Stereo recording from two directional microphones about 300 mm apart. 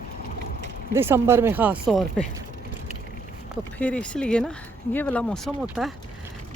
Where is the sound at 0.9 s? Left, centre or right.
Centre.